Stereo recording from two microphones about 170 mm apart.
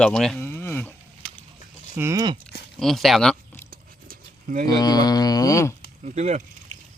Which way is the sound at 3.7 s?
55° right (ahead or behind).